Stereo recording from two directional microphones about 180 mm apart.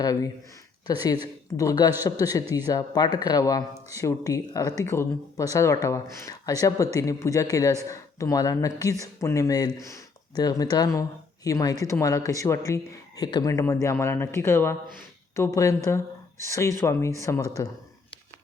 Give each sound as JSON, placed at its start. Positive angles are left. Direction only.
{"t": 0.0, "sound": "speech", "side_deg": 20}